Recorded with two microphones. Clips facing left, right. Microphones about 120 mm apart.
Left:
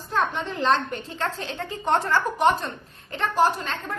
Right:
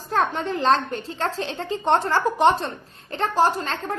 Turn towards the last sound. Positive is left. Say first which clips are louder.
# right 2 dB
turn(degrees=-35)  # may be behind; listen again after turning